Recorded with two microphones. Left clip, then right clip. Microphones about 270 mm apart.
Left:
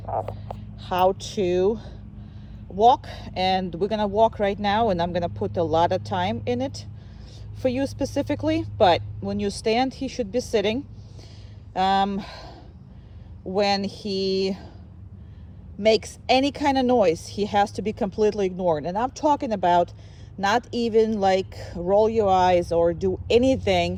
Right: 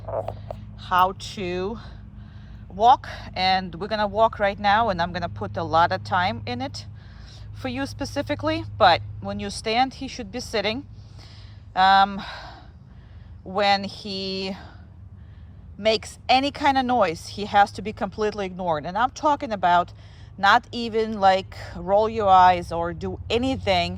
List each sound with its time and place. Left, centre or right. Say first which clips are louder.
0.3 s speech: right 1 dB; centre
13.6 s speech: right 2 dB; centre
15.8 s speech: left 2 dB; centre